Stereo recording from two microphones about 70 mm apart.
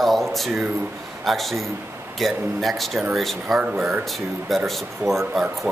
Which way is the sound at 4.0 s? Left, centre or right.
Centre.